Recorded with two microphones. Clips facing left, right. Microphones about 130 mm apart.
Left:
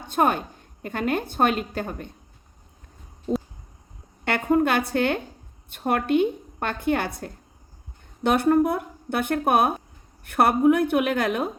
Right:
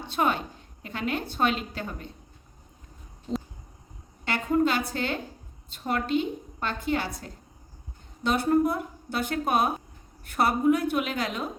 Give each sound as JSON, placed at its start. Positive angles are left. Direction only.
{"t": 0.0, "sound": "a woman's voice", "side_deg": 45}
{"t": 4.3, "sound": "a woman's voice", "side_deg": 60}